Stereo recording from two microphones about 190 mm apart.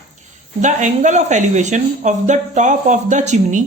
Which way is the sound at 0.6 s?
40° right (ahead or behind).